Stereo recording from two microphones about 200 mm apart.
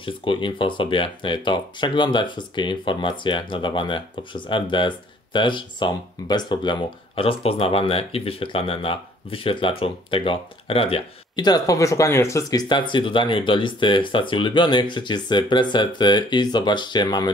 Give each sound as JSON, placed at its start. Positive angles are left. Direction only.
{"t": 0.0, "sound": "speech", "side_deg": 25}